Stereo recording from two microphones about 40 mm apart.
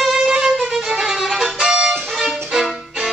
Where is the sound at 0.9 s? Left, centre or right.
Centre.